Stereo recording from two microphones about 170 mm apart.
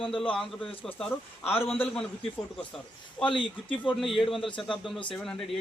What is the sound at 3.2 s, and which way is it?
Speech, 30° left (ahead or behind).